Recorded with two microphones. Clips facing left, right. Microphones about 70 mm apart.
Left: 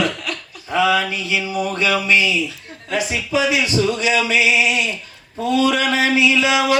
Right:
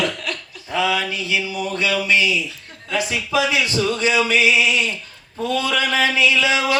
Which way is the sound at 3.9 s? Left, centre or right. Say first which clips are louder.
Even; right.